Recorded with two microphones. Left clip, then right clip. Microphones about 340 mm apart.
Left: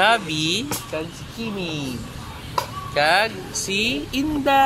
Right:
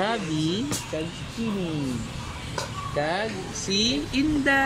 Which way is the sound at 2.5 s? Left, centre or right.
Left.